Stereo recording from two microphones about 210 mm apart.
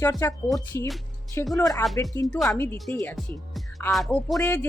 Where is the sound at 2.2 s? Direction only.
Centre (ahead or behind).